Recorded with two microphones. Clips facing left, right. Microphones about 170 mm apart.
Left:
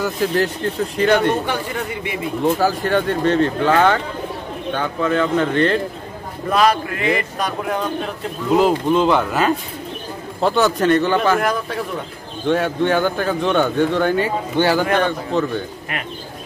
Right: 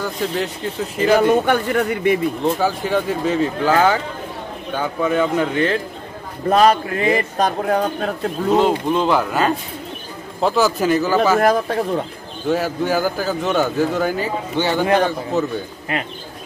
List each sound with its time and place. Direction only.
0.0 s speech: centre (ahead or behind)
1.4 s a man's voice: 55° right (ahead or behind)
2.4 s speech: centre (ahead or behind)
6.5 s speech: 35° right (ahead or behind)
8.5 s speech: centre (ahead or behind)
11.4 s speech: 35° right (ahead or behind)
12.4 s speech: 5° right (ahead or behind)